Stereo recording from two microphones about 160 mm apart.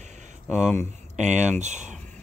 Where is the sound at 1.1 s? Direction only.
50° right (ahead or behind).